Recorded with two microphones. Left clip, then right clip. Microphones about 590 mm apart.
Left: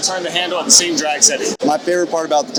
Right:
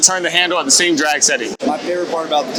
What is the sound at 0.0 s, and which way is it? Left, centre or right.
Speech, right.